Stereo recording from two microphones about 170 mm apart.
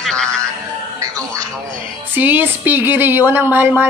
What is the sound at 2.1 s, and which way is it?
Speech, 10° right (ahead or behind).